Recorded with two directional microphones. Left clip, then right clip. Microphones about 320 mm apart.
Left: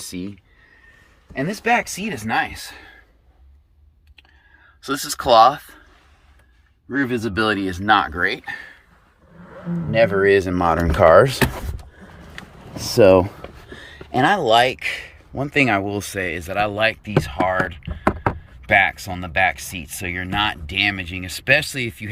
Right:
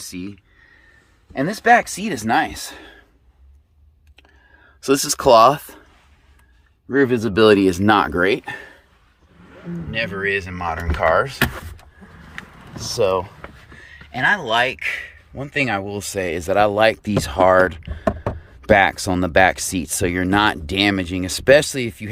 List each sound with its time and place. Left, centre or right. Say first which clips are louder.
0.0 s speech: left 1 dB; centre
2.1 s speech: right 3 dB; centre
4.8 s speech: right 7 dB; right
6.9 s speech: right 5 dB; centre
9.9 s speech: left 7 dB; centre
10.7 s speech: left 5 dB; left
12.7 s speech: left 6 dB; left; by 18.0 s centre
18.0 s a sound: left 2 dB; left
18.7 s speech: right 2 dB; centre